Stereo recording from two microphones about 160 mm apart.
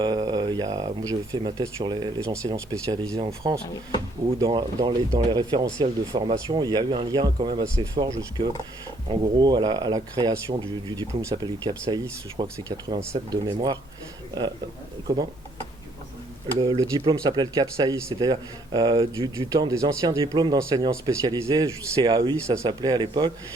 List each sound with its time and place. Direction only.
0.0 s speech: 25° right (ahead or behind)
9.4 s speech: 25° right (ahead or behind)
15.0 s speech: 25° right (ahead or behind)
16.6 s speech: 25° right (ahead or behind)